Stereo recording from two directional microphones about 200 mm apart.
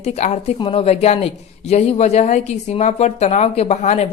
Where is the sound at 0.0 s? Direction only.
35° left (ahead or behind).